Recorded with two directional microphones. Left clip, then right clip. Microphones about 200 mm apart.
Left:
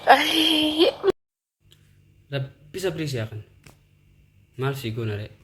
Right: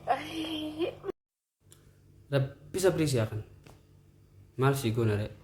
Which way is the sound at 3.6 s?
50° left (ahead or behind).